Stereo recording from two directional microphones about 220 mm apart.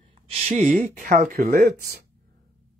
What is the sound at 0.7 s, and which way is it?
Speech, 35° right (ahead or behind).